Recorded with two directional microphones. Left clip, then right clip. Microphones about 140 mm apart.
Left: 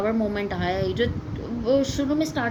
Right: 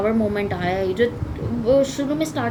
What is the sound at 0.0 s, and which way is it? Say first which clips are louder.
A woman's voice: right 4 dB; 45° left (ahead or behind).